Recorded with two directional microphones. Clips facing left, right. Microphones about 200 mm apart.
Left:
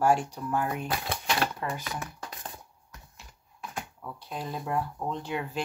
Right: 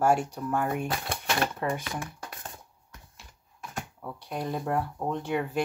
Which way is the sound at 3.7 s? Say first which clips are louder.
Right 2 dB; 45° right (ahead or behind).